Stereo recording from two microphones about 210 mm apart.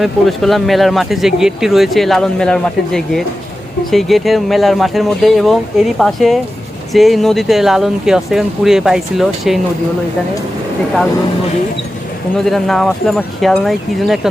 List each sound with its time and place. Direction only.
0.0 s speech: centre (ahead or behind)
12.5 s speech: centre (ahead or behind)